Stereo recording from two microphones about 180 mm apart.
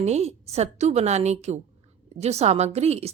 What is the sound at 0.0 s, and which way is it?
A woman's voice, 35° right (ahead or behind).